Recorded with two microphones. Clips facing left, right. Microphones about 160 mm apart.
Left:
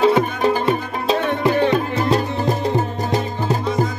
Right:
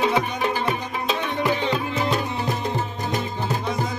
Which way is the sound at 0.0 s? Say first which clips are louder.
Left 6 dB; 40° left (ahead or behind).